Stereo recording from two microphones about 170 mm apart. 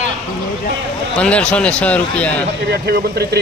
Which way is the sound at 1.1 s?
5° left (ahead or behind).